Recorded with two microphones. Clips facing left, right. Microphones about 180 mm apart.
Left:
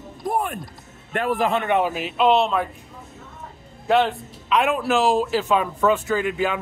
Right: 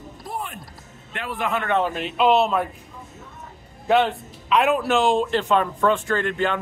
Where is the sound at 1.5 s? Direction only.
20° left (ahead or behind).